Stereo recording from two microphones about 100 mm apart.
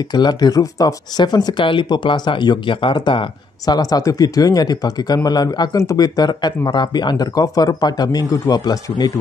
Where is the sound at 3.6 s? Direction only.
40° left (ahead or behind).